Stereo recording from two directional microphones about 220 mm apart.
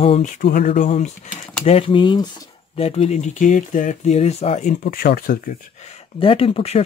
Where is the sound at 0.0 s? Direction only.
30° left (ahead or behind).